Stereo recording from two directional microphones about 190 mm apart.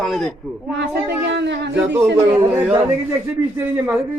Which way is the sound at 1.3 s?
65° right (ahead or behind).